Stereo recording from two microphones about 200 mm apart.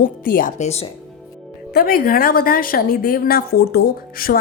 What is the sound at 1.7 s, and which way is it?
Speech, 50° left (ahead or behind).